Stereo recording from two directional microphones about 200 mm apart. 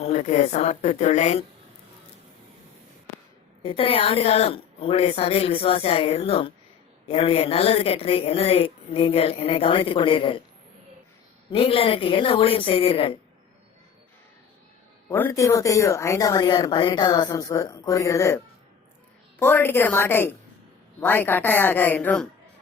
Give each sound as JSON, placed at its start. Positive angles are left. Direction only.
{"t": 0.0, "sound": "speech", "side_deg": 35}
{"t": 3.6, "sound": "a woman's voice", "side_deg": 25}
{"t": 11.5, "sound": "a woman's voice", "side_deg": 25}
{"t": 15.1, "sound": "a woman's voice", "side_deg": 10}